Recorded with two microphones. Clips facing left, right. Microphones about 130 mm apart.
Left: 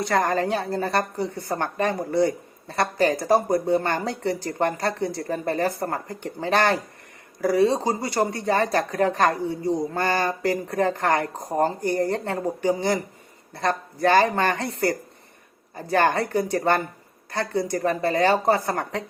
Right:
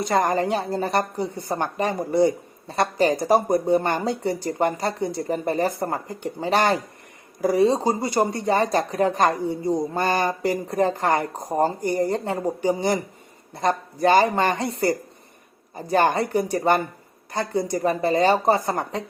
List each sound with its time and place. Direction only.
0.0 s speech: 15° right (ahead or behind)